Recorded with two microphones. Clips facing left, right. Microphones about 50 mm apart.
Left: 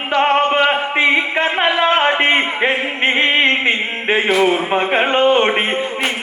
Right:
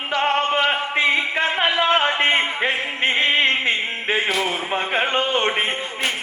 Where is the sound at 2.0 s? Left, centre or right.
Centre.